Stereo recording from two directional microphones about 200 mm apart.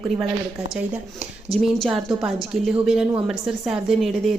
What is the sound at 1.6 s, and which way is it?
A woman's voice, centre (ahead or behind).